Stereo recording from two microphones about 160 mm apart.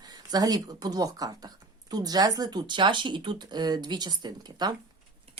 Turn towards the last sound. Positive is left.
turn(degrees=-25)  # may be behind; listen again after turning